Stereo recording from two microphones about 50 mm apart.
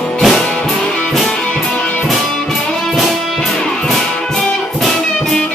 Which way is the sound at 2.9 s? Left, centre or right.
Centre.